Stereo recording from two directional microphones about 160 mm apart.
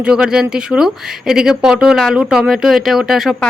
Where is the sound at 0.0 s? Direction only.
5° right (ahead or behind).